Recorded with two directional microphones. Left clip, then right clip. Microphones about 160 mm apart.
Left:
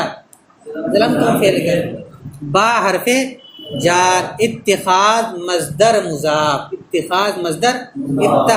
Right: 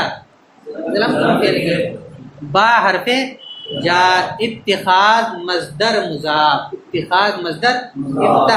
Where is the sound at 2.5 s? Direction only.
30° left (ahead or behind); by 4.4 s 45° left (ahead or behind).